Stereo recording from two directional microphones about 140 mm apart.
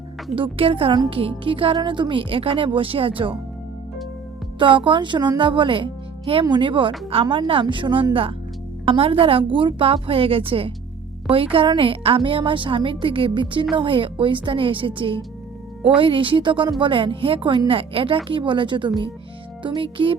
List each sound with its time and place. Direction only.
0.3 s speech: 40° right (ahead or behind)
4.6 s speech: 35° right (ahead or behind)